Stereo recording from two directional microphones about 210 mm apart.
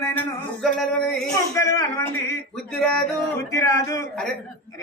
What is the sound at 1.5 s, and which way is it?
Speech, 15° left (ahead or behind).